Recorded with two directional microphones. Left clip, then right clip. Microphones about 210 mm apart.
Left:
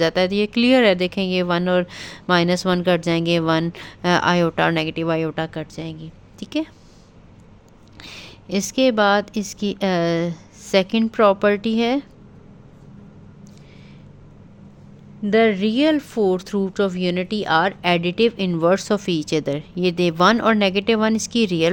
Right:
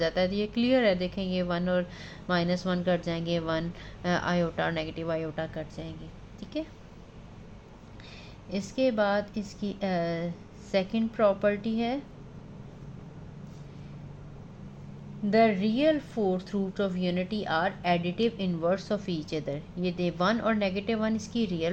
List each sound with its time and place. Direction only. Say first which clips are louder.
0.0 s speech: left 9 dB; 50° left (ahead or behind)
8.0 s speech: left 12 dB; 60° left (ahead or behind)
15.3 s speech: left 7 dB; 50° left (ahead or behind)